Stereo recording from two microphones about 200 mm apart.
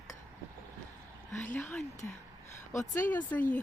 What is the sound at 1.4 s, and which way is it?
Speech, 5° left (ahead or behind).